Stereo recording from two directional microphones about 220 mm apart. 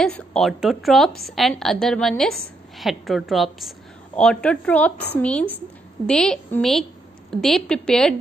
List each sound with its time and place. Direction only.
0.0 s a woman's voice: 5° left (ahead or behind)